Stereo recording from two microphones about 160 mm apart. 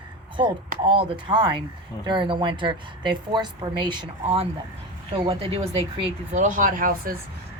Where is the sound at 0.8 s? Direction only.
35° right (ahead or behind).